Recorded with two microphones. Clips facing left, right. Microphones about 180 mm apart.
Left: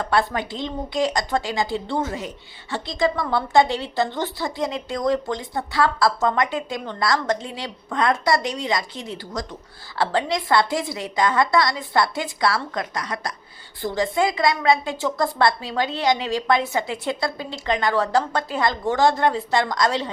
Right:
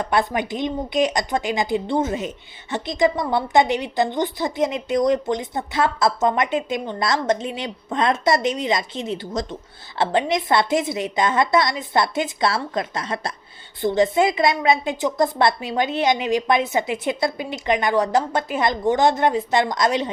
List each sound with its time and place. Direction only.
0.0 s a woman's voice: 20° right (ahead or behind)